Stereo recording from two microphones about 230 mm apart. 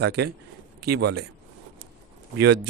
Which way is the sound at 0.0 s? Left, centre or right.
Right.